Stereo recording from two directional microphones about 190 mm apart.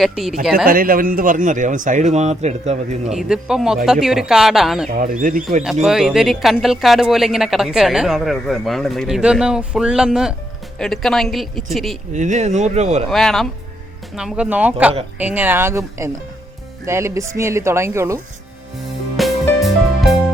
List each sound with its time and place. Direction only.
0.0 s speech: centre (ahead or behind)
0.5 s speech: 50° right (ahead or behind)
3.1 s speech: 5° right (ahead or behind)
4.9 s speech: 45° right (ahead or behind)
5.8 s speech: centre (ahead or behind)
12.1 s speech: 40° right (ahead or behind)
13.1 s speech: centre (ahead or behind); by 18.2 s 15° right (ahead or behind)
19.1 s music: centre (ahead or behind)